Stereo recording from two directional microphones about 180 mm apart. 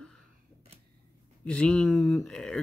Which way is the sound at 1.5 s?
5° left (ahead or behind).